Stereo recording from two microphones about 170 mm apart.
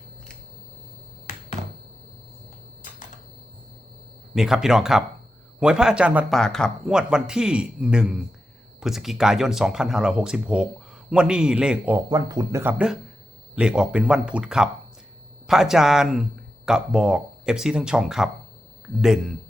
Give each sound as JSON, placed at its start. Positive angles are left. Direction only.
{"t": 4.4, "sound": "speech", "side_deg": -5}
{"t": 6.4, "sound": "speech", "side_deg": 5}
{"t": 12.0, "sound": "speech", "side_deg": -25}
{"t": 13.6, "sound": "speech", "side_deg": -5}